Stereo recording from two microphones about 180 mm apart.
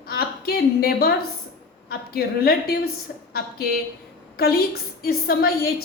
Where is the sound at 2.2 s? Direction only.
60° left (ahead or behind).